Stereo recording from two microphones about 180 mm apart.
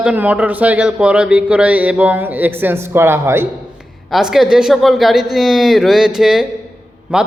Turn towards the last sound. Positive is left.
turn(degrees=-5)  # may be behind; listen again after turning